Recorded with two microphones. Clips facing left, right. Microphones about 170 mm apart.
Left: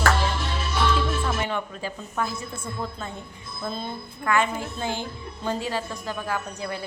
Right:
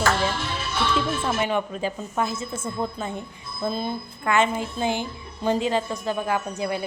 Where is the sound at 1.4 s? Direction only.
20° right (ahead or behind).